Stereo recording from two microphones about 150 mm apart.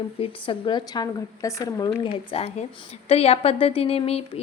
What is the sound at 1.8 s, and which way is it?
A woman's voice, 40° left (ahead or behind).